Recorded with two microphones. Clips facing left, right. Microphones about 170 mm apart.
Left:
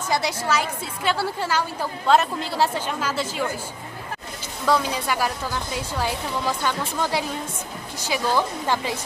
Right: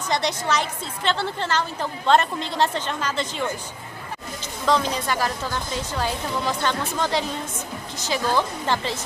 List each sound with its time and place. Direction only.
0.1 s a woman's voice: 5° left (ahead or behind)
4.6 s a woman's voice: 10° left (ahead or behind)